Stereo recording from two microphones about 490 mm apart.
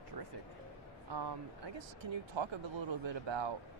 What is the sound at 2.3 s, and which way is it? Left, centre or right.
Speech, right.